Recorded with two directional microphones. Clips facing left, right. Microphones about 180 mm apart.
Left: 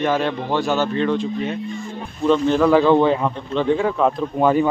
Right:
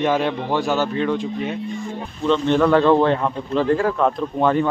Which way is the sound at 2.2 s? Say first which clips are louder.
Left 1 dB; 5° left (ahead or behind).